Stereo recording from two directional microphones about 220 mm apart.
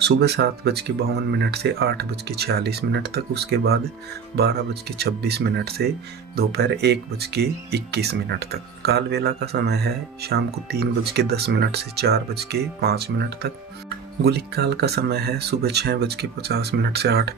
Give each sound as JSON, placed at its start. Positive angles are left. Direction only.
{"t": 0.0, "sound": "speech", "side_deg": -50}